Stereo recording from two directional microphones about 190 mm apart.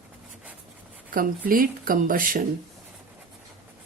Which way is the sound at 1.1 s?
45° right (ahead or behind).